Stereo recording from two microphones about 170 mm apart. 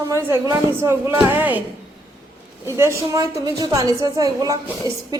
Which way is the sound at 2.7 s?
15° right (ahead or behind).